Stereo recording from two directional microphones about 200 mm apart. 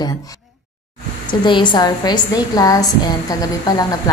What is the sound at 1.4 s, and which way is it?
A woman's voice, 25° left (ahead or behind).